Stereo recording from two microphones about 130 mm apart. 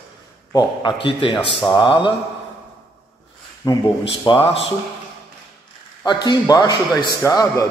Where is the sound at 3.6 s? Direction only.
30° left (ahead or behind).